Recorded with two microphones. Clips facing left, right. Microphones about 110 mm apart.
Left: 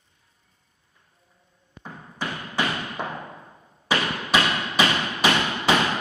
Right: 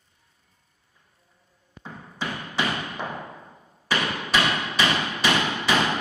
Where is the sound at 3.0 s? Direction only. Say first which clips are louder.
Left 1 dB; 20° left (ahead or behind).